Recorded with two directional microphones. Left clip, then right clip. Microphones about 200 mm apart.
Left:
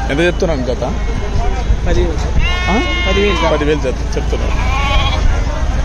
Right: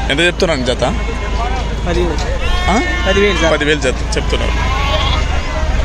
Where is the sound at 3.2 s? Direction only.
35° right (ahead or behind).